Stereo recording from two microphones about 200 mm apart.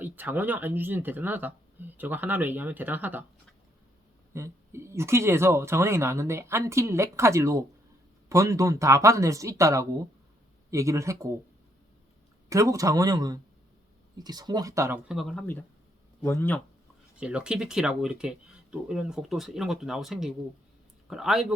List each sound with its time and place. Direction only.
0.0 s speech: 10° right (ahead or behind)
4.4 s speech: 15° right (ahead or behind)
12.5 s speech: 15° right (ahead or behind)
16.2 s speech: 10° left (ahead or behind)
17.2 s speech: 5° right (ahead or behind)